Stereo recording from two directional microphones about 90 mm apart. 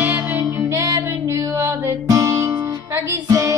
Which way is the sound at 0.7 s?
40° right (ahead or behind).